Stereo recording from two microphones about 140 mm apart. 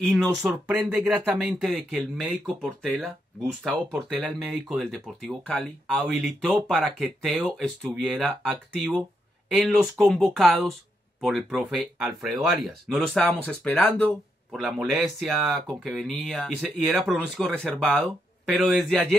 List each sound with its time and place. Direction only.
0.5 s speech: 15° right (ahead or behind); by 13.7 s 10° left (ahead or behind)
14.5 s speech: centre (ahead or behind)